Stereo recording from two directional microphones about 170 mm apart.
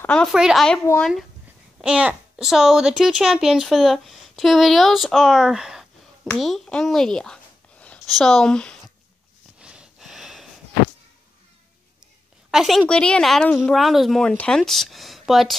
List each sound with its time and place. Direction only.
0.0 s a child's voice: 5° left (ahead or behind)
1.8 s a child's voice: 5° right (ahead or behind)
9.6 s a sound: 5° right (ahead or behind)
12.4 s a child's voice: centre (ahead or behind)